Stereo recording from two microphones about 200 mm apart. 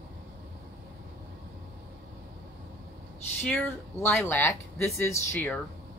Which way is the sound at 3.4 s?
5° left (ahead or behind).